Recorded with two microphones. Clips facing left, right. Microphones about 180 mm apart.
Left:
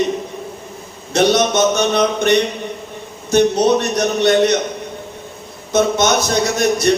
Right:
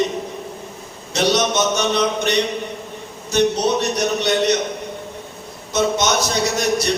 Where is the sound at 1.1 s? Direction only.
55° left (ahead or behind).